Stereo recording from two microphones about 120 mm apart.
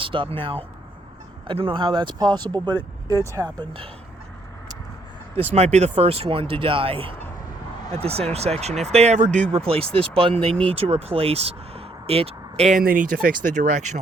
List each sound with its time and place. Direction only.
0.0 s speech: 45° right (ahead or behind); by 3.5 s 30° right (ahead or behind)
3.6 s speech: 40° right (ahead or behind)
5.4 s speech: 60° right (ahead or behind)
5.9 s speech: 55° right (ahead or behind); by 9.4 s 85° right
9.5 s speech: 55° right (ahead or behind); by 13.8 s 90° right